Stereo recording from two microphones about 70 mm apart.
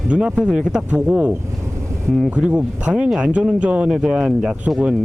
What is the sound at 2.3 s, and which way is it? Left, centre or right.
Speech, centre.